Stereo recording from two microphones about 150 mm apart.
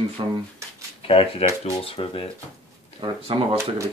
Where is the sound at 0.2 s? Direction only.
35° right (ahead or behind).